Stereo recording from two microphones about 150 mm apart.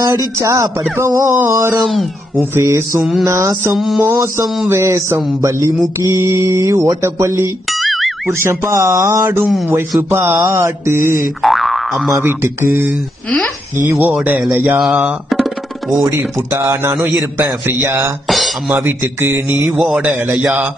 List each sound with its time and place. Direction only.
0.4 s mantra: 20° right (ahead or behind)
1.8 s speech: centre (ahead or behind)
2.5 s a man's voice: 20° right (ahead or behind)
3.0 s speech: centre (ahead or behind)
3.3 s mantra: 20° right (ahead or behind)
3.7 s speech: centre (ahead or behind)
4.0 s a man's voice: 20° right (ahead or behind)
4.6 s mantra: 20° right (ahead or behind)
7.7 s music: centre (ahead or behind)
8.3 s a man's voice: 15° right (ahead or behind)
11.4 s boing: centre (ahead or behind)
12.2 s a man's voice: 15° right (ahead or behind)
16.1 s a man's voice: 15° right (ahead or behind)